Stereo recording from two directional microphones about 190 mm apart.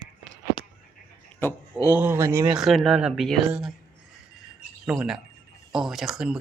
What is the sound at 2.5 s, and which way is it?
Speech, 5° right (ahead or behind).